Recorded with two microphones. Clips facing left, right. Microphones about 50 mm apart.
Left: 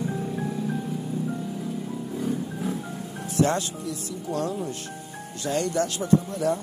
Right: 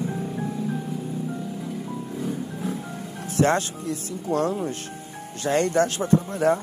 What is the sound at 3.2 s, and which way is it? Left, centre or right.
Speech, right.